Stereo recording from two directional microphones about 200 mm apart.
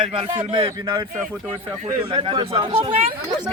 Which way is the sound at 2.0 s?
20° right (ahead or behind).